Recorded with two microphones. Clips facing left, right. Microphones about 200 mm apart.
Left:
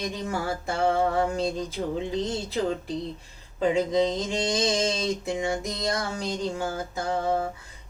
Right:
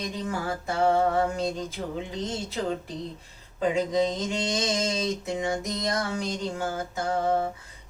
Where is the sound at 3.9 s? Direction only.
30° left (ahead or behind).